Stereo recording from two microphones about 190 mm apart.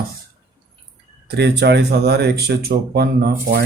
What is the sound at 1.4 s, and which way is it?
Speech, 65° right (ahead or behind).